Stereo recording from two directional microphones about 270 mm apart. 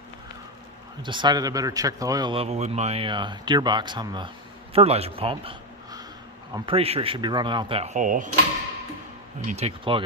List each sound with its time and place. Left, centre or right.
1.0 s a man's voice: centre
9.5 s speech: right